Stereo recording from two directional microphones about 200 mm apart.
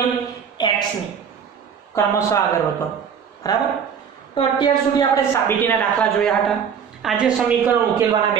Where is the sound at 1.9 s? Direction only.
15° left (ahead or behind).